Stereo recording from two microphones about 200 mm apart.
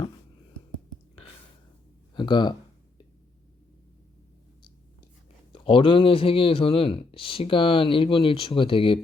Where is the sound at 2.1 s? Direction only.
20° left (ahead or behind).